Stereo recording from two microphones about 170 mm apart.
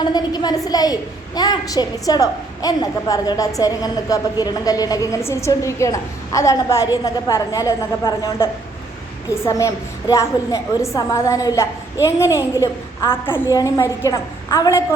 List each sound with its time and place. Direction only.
0.0 s a woman's voice: 25° left (ahead or behind)